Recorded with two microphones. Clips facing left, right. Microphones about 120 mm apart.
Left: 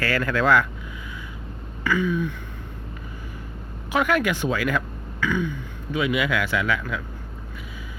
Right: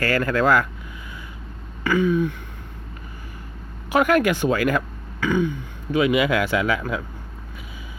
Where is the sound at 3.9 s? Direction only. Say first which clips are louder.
Right 4 dB; 45° right (ahead or behind).